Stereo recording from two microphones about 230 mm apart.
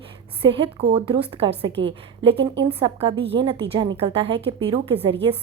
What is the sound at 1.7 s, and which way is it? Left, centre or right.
Speech, right.